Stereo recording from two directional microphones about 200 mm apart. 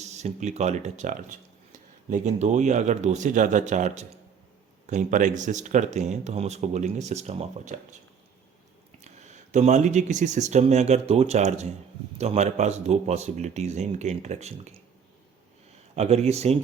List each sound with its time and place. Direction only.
0.0 s speech: 35° right (ahead or behind)
9.0 s speech: 35° right (ahead or behind)
16.0 s speech: 30° right (ahead or behind)